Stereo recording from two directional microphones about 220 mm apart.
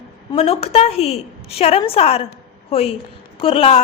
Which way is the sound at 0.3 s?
25° left (ahead or behind).